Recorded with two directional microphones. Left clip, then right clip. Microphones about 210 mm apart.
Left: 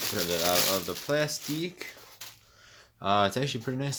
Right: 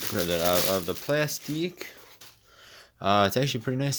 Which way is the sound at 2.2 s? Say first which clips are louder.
Left 5 dB; 15° left (ahead or behind).